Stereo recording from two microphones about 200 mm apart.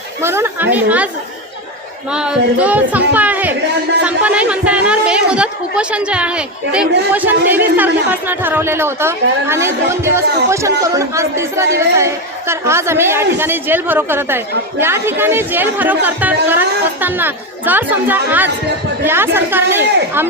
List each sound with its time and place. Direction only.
0.2 s a woman's voice: 10° right (ahead or behind)